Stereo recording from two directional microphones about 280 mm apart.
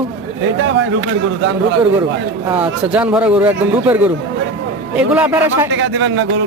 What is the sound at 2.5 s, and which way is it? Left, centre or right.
Speech, centre.